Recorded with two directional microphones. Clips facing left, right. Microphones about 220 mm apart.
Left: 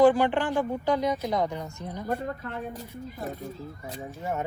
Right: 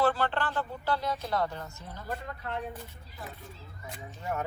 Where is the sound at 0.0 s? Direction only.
15° left (ahead or behind).